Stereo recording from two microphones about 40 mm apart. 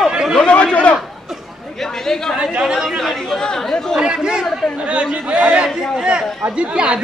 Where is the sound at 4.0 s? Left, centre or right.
Right.